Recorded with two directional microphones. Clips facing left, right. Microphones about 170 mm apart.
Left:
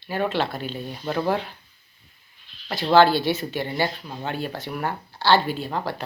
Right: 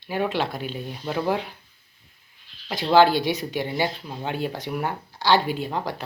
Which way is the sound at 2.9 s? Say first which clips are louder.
Left 1 dB; 15° right (ahead or behind).